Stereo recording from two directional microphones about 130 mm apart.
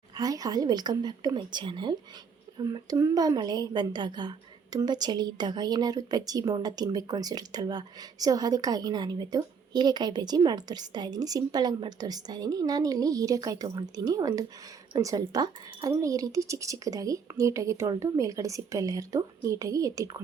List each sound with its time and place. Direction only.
0.2 s a woman's voice: 30° right (ahead or behind)